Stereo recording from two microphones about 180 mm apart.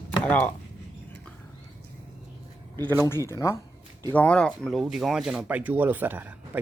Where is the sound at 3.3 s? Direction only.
15° left (ahead or behind); by 6.6 s 10° right (ahead or behind).